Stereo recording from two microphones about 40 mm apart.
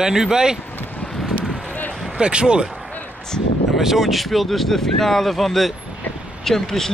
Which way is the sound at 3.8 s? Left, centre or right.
Centre.